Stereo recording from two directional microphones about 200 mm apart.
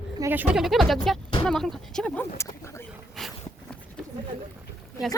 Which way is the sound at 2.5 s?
15° left (ahead or behind).